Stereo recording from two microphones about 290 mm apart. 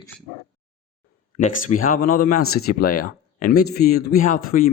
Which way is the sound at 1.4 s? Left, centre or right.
Left.